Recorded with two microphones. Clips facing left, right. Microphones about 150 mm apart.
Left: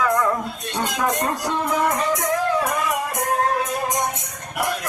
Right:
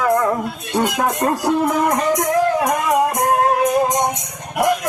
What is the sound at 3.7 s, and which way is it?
Music, 20° right (ahead or behind).